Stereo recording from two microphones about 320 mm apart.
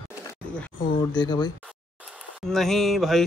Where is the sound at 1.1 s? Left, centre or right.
Centre.